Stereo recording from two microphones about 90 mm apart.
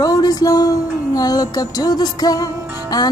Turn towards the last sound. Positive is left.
turn(degrees=50)  # may be behind; listen again after turning